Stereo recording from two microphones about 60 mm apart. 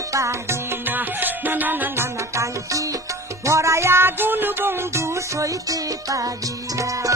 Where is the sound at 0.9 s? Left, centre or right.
Right.